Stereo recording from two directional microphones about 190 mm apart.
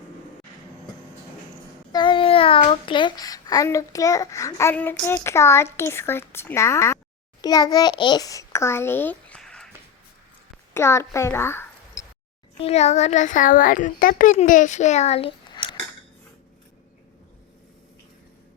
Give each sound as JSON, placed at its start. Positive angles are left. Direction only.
{"t": 1.9, "sound": "a child's voice", "side_deg": 25}
{"t": 10.8, "sound": "a child's voice", "side_deg": 15}
{"t": 12.5, "sound": "a child's voice", "side_deg": 35}